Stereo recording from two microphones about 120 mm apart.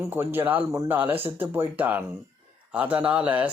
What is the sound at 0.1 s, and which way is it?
A man's voice, 20° right (ahead or behind).